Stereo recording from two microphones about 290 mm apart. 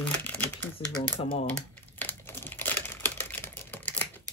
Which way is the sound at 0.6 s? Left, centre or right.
Centre.